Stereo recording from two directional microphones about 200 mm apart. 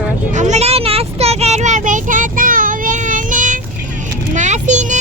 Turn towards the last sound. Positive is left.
turn(degrees=-35)  # may be behind; listen again after turning